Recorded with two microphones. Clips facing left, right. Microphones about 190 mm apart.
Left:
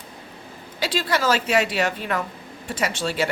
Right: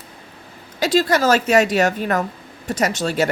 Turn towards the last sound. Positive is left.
turn(degrees=-45)  # may be behind; listen again after turning